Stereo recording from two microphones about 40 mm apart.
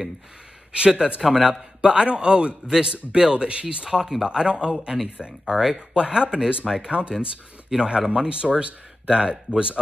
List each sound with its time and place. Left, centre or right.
0.7 s speech: right
1.2 s a man's voice: centre
1.8 s a man's voice: right
4.5 s speech: right
5.5 s speech: centre
6.0 s speech: right